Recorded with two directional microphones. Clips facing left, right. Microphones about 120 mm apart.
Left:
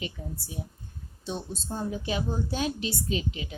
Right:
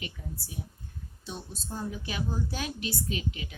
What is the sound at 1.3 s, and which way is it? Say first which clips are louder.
A woman's voice: left 6 dB; 25° left (ahead or behind).